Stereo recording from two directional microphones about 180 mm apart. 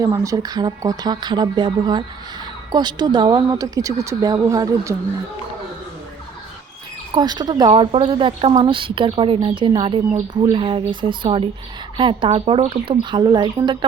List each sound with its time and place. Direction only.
0.0 s a woman's voice: 20° right (ahead or behind)
7.1 s a woman's voice: 25° right (ahead or behind)